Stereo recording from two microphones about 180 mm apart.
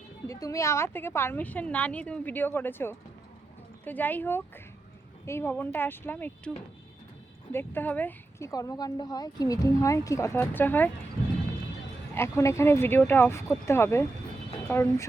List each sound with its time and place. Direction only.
0.3 s speech: 20° left (ahead or behind)
7.5 s speech: 10° left (ahead or behind)
12.1 s speech: 15° left (ahead or behind)